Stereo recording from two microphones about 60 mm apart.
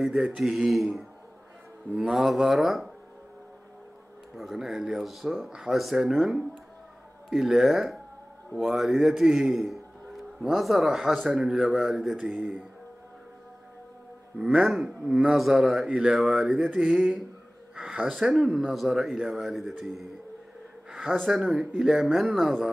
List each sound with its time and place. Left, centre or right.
0.4 s speech: centre
4.4 s a man's voice: centre
12.2 s speech: right
14.4 s speech: centre
15.9 s speech: centre
16.2 s speech: centre
17.7 s a sound: centre
18.0 s speech: centre
21.3 s speech: centre